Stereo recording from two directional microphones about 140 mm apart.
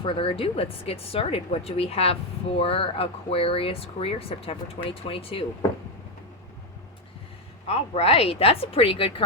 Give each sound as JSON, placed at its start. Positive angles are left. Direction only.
{"t": 0.0, "sound": "speech", "side_deg": 40}
{"t": 7.7, "sound": "speech", "side_deg": 45}